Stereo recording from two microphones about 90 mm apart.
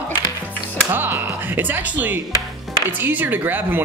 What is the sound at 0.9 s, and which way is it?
Speech, 25° right (ahead or behind).